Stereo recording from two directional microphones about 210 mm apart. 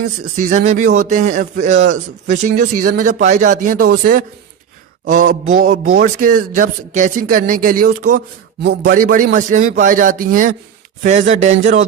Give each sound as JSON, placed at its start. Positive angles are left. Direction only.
{"t": 0.3, "sound": "a man's voice", "side_deg": -35}